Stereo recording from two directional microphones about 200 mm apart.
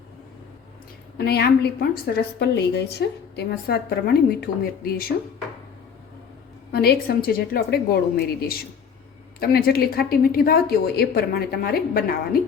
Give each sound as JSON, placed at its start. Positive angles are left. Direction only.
{"t": 1.2, "sound": "a woman's voice", "side_deg": 55}
{"t": 6.7, "sound": "a woman's voice", "side_deg": 50}